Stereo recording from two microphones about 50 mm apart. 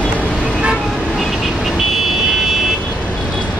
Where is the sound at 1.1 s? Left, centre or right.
Centre.